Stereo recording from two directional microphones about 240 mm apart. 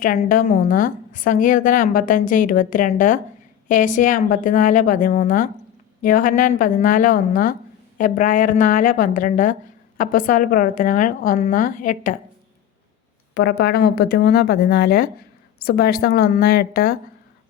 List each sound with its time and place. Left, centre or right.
0.0 s a woman's voice: left
13.3 s a woman's voice: left